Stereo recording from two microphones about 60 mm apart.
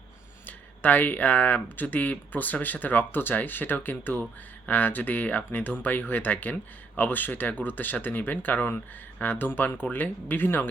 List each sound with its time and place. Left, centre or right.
0.4 s speech: left